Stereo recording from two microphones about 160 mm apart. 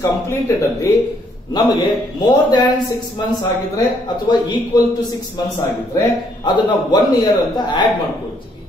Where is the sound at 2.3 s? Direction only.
25° left (ahead or behind).